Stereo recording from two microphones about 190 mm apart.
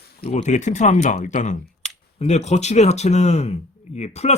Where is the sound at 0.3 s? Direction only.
40° left (ahead or behind).